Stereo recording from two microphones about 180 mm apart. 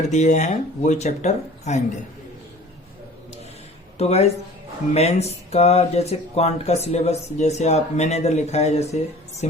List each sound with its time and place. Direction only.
0.1 s speech: 40° left (ahead or behind)
3.9 s speech: 35° left (ahead or behind)